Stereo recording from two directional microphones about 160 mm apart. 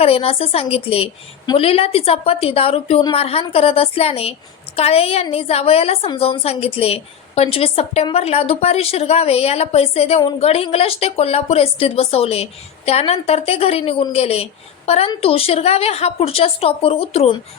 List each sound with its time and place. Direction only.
0.0 s a woman's voice: 35° left (ahead or behind)